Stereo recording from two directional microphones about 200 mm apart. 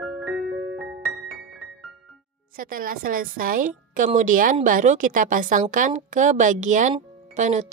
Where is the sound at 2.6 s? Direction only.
45° right (ahead or behind).